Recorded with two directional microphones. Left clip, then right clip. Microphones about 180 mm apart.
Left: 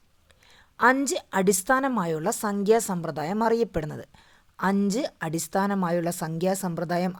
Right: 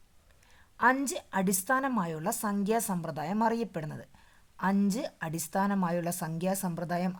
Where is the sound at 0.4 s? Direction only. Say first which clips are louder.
Left 5 dB; 25° left (ahead or behind).